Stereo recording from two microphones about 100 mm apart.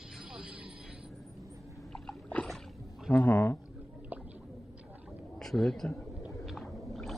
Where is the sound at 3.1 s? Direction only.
15° left (ahead or behind).